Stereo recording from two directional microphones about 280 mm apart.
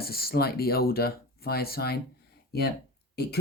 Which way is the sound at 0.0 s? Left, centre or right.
Left.